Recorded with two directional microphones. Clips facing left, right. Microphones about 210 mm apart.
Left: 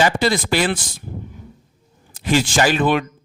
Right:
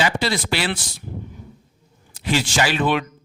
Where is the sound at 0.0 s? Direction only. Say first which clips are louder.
Left 4 dB; 50° left (ahead or behind).